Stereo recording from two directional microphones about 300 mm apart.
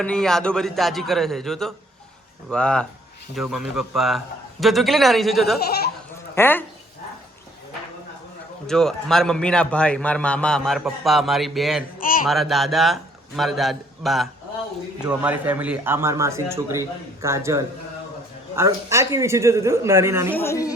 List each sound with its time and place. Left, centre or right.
0.0 s a man's voice: centre
8.6 s a man's voice: centre
11.9 s a sound: left
12.3 s a man's voice: centre
20.3 s speech: centre